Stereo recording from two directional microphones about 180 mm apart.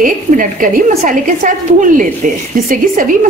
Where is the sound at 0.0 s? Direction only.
50° right (ahead or behind).